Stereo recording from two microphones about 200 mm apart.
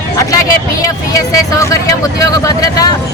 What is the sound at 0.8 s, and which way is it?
Speech, 15° left (ahead or behind).